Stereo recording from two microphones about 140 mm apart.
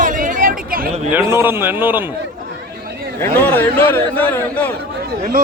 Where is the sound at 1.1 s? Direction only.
15° right (ahead or behind).